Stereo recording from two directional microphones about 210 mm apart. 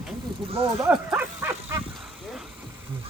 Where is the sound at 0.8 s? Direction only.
5° right (ahead or behind).